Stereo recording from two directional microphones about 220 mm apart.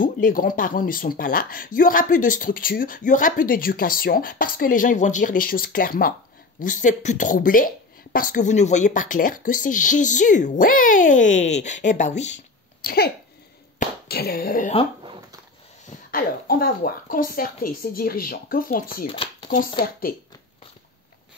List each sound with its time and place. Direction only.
0.0 s speech: 40° left (ahead or behind)
12.8 s a sound: 45° left (ahead or behind)
16.1 s speech: 40° left (ahead or behind)
19.0 s speech: 25° left (ahead or behind)
19.8 s speech: 40° left (ahead or behind)